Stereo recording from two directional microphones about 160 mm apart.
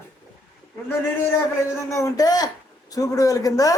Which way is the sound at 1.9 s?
20° left (ahead or behind).